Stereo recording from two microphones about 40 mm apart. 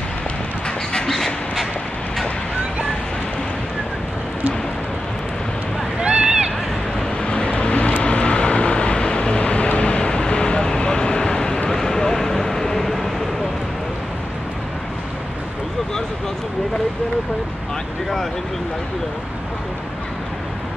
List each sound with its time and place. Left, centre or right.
1.0 s dog: centre
5.9 s a sound: right
7.2 s vehicle: left; by 13.1 s centre